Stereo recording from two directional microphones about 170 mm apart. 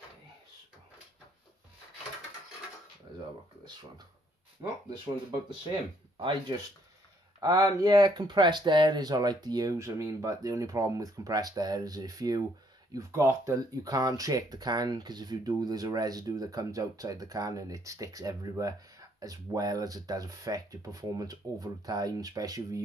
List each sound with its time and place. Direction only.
6.1 s speech: 30° right (ahead or behind)